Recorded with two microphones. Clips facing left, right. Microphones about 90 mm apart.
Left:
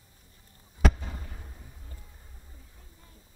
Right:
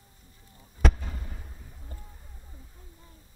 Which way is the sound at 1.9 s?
35° right (ahead or behind).